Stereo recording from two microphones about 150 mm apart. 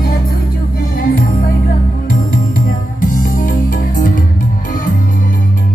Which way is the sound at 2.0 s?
70° left (ahead or behind).